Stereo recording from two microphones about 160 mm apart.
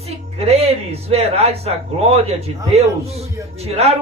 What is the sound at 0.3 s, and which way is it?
A man's voice, 40° right (ahead or behind).